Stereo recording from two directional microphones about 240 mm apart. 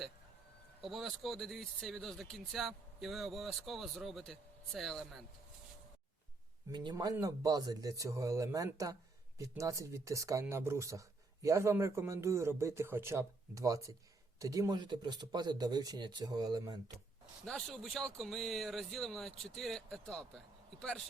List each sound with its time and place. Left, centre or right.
0.8 s speech: centre
6.7 s speech: centre
17.4 s speech: centre